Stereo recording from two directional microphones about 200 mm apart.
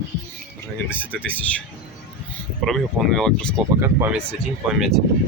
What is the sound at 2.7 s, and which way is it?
Speech, centre (ahead or behind).